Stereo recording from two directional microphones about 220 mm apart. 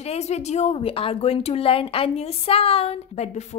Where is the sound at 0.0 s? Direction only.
30° left (ahead or behind).